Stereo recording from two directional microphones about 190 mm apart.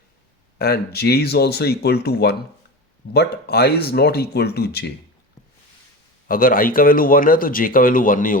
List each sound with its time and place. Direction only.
0.6 s speech: 55° left (ahead or behind)
6.2 s speech: 50° left (ahead or behind)